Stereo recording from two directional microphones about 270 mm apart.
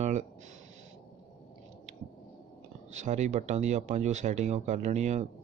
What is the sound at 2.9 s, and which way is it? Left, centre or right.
Speech, right.